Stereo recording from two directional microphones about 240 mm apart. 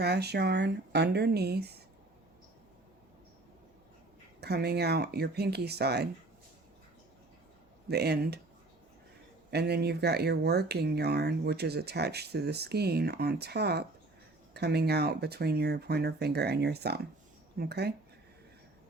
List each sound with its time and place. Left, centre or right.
0.0 s speech: right
4.4 s speech: right
7.9 s speech: right
9.5 s speech: right